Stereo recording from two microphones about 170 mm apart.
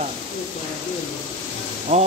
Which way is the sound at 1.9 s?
40° right (ahead or behind).